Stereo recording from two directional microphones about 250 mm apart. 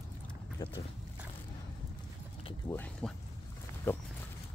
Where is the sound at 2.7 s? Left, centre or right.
Centre.